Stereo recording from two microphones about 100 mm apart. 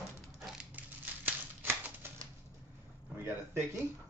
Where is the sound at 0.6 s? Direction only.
15° right (ahead or behind).